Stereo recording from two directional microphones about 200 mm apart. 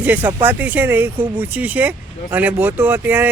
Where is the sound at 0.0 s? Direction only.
10° right (ahead or behind).